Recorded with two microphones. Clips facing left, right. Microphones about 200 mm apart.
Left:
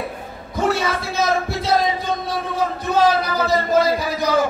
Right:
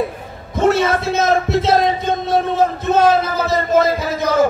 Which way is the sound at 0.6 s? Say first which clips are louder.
Right 6 dB; 20° right (ahead or behind).